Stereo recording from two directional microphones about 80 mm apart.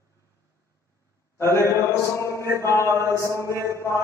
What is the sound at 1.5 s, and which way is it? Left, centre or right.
A man's voice, right.